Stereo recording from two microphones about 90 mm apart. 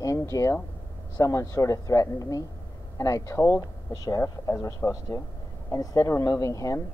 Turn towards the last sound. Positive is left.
turn(degrees=35)  # may be behind; listen again after turning